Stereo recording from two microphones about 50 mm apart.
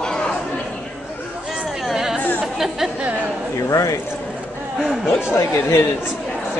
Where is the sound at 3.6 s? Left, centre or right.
Left.